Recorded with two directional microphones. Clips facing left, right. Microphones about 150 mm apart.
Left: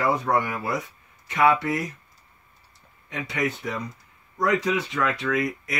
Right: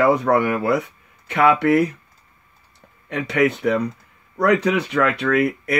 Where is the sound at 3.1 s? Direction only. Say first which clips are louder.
Right 9 dB; 70° right (ahead or behind).